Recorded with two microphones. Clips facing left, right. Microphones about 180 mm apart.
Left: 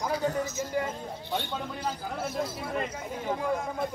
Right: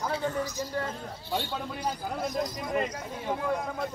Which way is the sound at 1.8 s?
10° right (ahead or behind).